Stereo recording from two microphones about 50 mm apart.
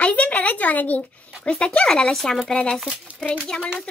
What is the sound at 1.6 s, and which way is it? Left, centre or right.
Speech, centre.